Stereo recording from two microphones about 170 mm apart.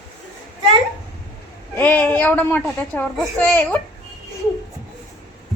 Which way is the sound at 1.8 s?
10° left (ahead or behind).